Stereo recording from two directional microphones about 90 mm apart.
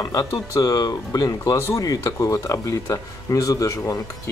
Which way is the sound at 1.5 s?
30° left (ahead or behind).